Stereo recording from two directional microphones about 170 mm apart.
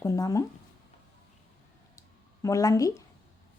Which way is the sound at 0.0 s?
20° left (ahead or behind).